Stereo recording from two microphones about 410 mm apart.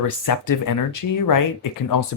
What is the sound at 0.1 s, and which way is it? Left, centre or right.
Speech, left.